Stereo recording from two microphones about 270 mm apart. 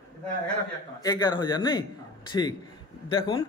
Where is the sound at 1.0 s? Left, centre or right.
Centre.